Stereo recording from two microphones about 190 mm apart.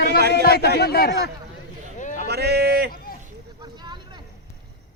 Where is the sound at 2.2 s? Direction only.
60° right (ahead or behind).